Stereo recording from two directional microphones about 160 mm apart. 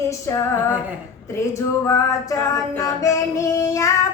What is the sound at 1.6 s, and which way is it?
Music, 20° left (ahead or behind).